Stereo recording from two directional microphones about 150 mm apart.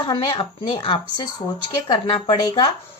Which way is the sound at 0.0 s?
30° left (ahead or behind).